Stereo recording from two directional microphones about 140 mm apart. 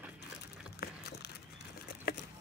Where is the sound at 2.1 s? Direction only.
90° left.